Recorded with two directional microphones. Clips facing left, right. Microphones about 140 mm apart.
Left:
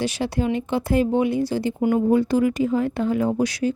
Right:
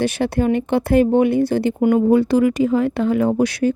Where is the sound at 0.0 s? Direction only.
55° right (ahead or behind).